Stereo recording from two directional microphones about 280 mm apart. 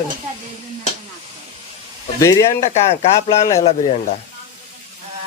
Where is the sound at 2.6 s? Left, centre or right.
Left.